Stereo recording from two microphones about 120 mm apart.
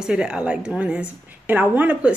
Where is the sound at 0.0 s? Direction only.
10° right (ahead or behind).